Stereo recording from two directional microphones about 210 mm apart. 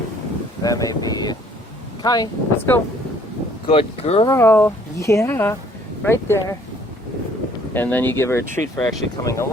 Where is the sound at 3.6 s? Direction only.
25° left (ahead or behind).